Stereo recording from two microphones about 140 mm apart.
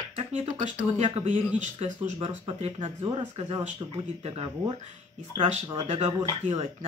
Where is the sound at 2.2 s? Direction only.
45° right (ahead or behind).